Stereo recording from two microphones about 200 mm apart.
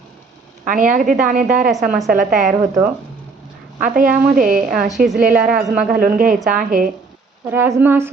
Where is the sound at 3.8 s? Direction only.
45° right (ahead or behind).